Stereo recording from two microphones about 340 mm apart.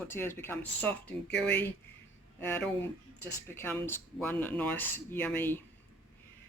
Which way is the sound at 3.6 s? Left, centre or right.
Centre.